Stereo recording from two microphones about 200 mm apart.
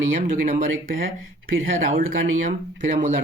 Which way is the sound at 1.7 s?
45° right (ahead or behind).